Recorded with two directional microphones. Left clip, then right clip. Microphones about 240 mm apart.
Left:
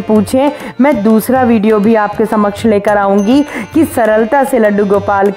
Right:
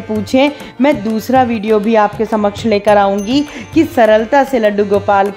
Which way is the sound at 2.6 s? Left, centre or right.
Centre.